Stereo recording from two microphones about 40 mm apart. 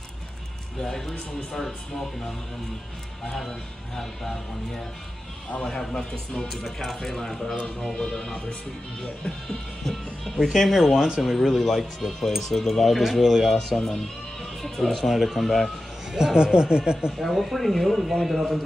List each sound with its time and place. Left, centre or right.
0.7 s speech: centre
3.3 s speech: centre
6.6 s speech: centre
9.8 s speech: centre
11.0 s speech: centre
11.3 s speech: centre
13.6 s speech: centre
16.2 s speech: centre
16.5 s speech: right
17.2 s speech: centre